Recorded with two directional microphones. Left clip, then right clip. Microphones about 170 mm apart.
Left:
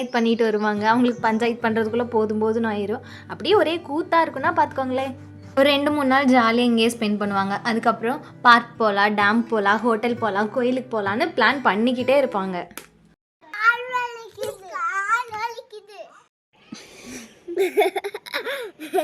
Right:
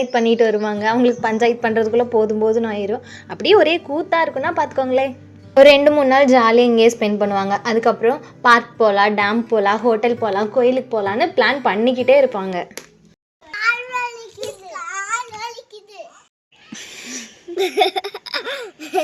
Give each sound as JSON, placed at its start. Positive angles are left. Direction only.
{"t": 0.0, "sound": "a woman's voice", "side_deg": 15}
{"t": 3.9, "sound": "a woman's voice", "side_deg": 10}
{"t": 14.7, "sound": "babbling", "side_deg": -5}
{"t": 17.0, "sound": "a sound", "side_deg": 20}
{"t": 17.5, "sound": "laughter", "side_deg": 0}